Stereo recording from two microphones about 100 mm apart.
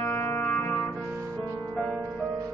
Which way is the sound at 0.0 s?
20° left (ahead or behind).